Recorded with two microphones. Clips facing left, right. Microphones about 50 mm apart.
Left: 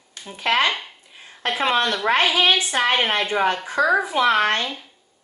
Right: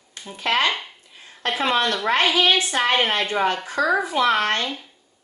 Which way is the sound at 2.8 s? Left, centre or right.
Centre.